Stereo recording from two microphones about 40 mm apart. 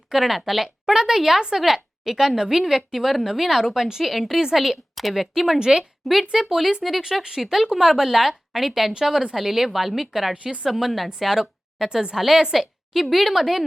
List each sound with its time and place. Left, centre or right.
0.1 s a woman's voice: centre
5.5 s a woman's voice: centre
6.0 s a woman's voice: centre
10.3 s a woman's voice: right
10.6 s a woman's voice: centre